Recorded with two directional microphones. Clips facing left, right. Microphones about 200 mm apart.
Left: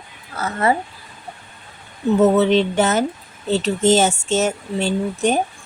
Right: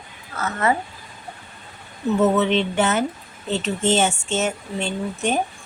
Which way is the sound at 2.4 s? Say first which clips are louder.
Left 4 dB; 40° left (ahead or behind).